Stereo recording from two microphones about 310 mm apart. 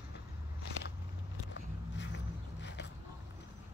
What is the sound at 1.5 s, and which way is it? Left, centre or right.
Walk, left.